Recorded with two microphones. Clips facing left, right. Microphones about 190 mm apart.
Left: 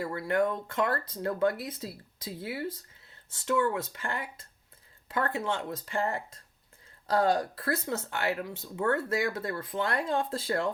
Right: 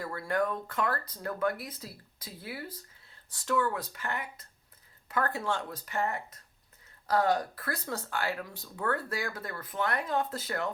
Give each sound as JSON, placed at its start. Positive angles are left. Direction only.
{"t": 0.0, "sound": "speech", "side_deg": 20}